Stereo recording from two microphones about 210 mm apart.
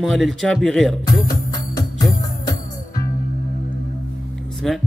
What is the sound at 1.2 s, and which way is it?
Music, 15° left (ahead or behind).